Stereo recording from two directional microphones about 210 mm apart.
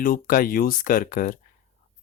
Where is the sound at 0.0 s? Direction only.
40° left (ahead or behind).